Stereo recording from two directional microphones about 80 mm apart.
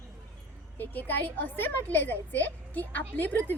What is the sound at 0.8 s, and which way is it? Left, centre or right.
A child's voice, left.